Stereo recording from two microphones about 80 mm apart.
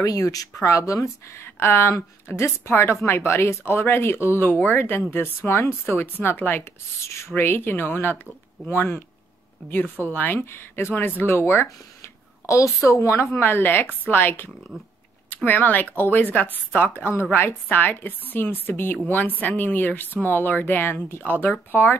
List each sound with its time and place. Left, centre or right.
0.0 s speech: left
10.1 s speech: left
12.0 s speech: left
14.7 s speech: centre
15.2 s speech: left